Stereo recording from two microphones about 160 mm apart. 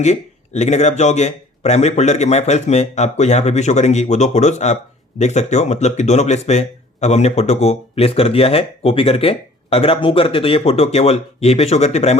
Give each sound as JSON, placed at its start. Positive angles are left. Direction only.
{"t": 0.0, "sound": "a man's voice", "side_deg": 45}